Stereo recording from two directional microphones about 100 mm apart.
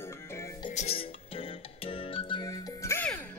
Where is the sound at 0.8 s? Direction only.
70° left (ahead or behind).